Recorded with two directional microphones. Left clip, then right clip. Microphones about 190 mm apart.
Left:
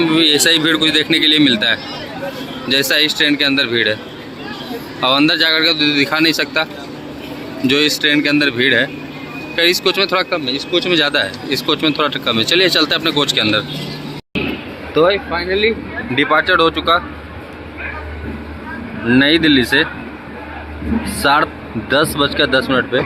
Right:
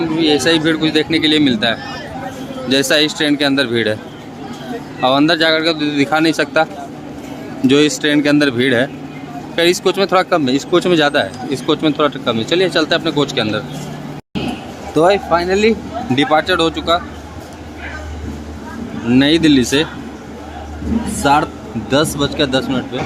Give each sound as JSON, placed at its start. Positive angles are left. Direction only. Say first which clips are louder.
{"t": 0.0, "sound": "speech", "louder": "left 2 dB", "side_deg": -5}
{"t": 4.9, "sound": "speech", "louder": "even", "side_deg": -15}
{"t": 7.7, "sound": "speech", "louder": "even", "side_deg": -20}
{"t": 10.8, "sound": "speech", "louder": "left 1 dB", "side_deg": -20}
{"t": 14.9, "sound": "speech", "louder": "right 2 dB", "side_deg": -45}
{"t": 16.1, "sound": "speech", "louder": "left 1 dB", "side_deg": -20}
{"t": 19.1, "sound": "speech", "louder": "even", "side_deg": -20}
{"t": 21.2, "sound": "speech", "louder": "even", "side_deg": -10}